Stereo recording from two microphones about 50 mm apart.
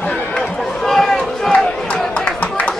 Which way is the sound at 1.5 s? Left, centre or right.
Left.